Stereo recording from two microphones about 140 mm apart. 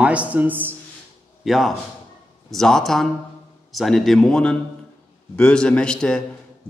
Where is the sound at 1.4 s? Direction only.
Centre (ahead or behind).